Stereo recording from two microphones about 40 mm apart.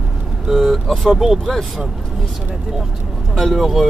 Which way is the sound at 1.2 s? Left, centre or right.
Centre.